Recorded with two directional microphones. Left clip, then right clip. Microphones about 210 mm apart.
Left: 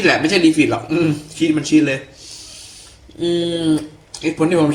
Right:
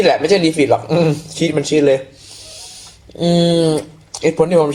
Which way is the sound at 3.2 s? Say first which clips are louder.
Right 5 dB; 25° right (ahead or behind).